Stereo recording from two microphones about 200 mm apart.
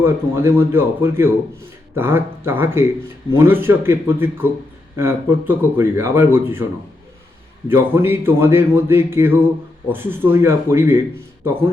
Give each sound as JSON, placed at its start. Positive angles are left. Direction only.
{"t": 0.0, "sound": "speech", "side_deg": -10}
{"t": 7.7, "sound": "speech", "side_deg": -10}